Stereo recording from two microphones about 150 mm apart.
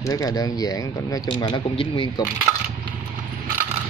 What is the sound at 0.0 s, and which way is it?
Speech, 20° left (ahead or behind).